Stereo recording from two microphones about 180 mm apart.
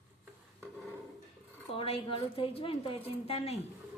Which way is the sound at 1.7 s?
30° left (ahead or behind).